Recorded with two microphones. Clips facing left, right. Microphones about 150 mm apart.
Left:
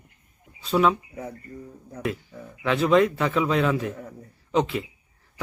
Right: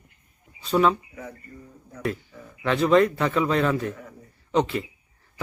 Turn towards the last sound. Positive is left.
turn(degrees=0)  # may be behind; listen again after turning